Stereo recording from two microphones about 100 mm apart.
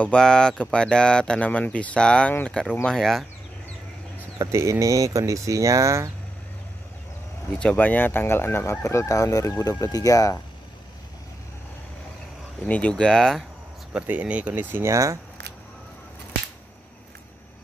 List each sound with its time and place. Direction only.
0.0 s speech: 10° left (ahead or behind)
4.4 s speech: 30° right (ahead or behind)
7.5 s speech: 10° left (ahead or behind); by 10.4 s 35° left (ahead or behind)
12.6 s speech: 15° left (ahead or behind)
13.9 s speech: 15° right (ahead or behind); by 15.1 s 30° right (ahead or behind)